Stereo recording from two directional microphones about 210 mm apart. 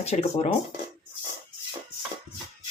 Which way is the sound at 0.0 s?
30° left (ahead or behind).